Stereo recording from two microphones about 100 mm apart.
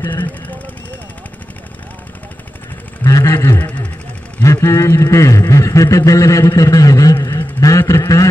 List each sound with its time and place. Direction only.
0.0 s vehicle: 20° left (ahead or behind)
3.0 s a sound: 30° left (ahead or behind)
4.4 s a man's voice: 30° left (ahead or behind)